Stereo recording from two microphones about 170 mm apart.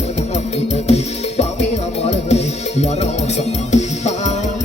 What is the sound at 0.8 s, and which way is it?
Music, 40° left (ahead or behind).